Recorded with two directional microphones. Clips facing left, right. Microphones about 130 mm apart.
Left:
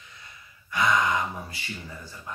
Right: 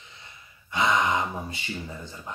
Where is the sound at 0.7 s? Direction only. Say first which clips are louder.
Even; 25° right (ahead or behind).